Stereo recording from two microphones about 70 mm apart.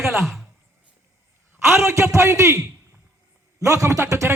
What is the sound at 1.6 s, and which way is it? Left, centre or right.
A man's voice, right.